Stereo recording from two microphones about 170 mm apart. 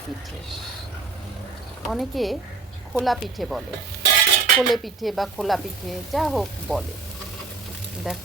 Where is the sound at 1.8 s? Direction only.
Centre (ahead or behind).